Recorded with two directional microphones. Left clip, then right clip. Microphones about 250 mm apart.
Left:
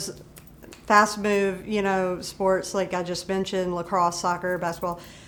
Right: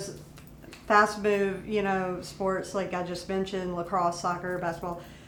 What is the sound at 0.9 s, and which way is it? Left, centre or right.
Speech, left.